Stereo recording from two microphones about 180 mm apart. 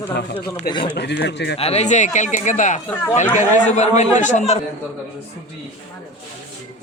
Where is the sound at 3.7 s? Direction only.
40° left (ahead or behind).